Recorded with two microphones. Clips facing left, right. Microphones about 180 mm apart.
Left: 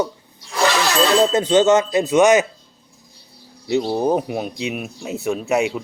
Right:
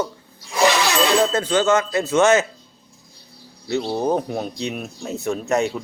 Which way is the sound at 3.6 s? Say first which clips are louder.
Left 3 dB; 15° left (ahead or behind).